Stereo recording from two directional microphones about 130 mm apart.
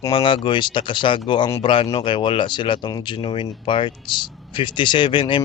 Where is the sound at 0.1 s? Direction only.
40° left (ahead or behind).